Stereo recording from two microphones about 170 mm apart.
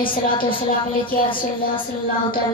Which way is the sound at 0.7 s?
55° left (ahead or behind).